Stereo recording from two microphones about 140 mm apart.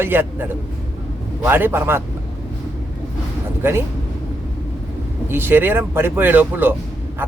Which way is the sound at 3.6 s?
15° right (ahead or behind).